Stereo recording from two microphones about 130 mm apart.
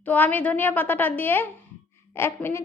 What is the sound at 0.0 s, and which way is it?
A woman's voice, 15° left (ahead or behind).